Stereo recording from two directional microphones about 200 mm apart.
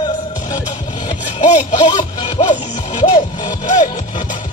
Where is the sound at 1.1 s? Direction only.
35° left (ahead or behind).